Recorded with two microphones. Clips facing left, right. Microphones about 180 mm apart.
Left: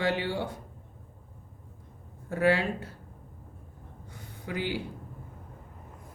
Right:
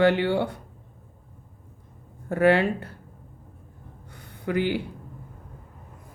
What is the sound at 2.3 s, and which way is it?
Speech, 60° right (ahead or behind).